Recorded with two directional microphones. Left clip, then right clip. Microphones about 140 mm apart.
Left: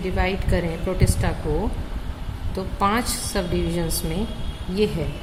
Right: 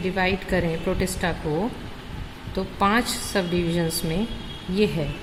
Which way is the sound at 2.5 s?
35° right (ahead or behind).